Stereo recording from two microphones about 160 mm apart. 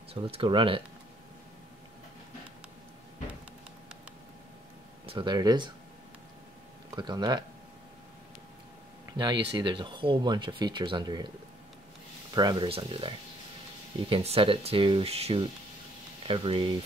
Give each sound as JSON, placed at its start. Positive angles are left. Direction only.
{"t": 0.1, "sound": "speech", "side_deg": -35}
{"t": 5.0, "sound": "speech", "side_deg": -30}
{"t": 7.0, "sound": "speech", "side_deg": -25}
{"t": 9.1, "sound": "speech", "side_deg": -30}
{"t": 12.4, "sound": "speech", "side_deg": -30}